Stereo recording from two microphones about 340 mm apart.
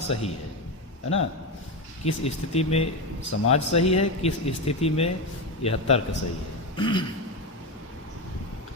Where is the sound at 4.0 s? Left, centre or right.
Centre.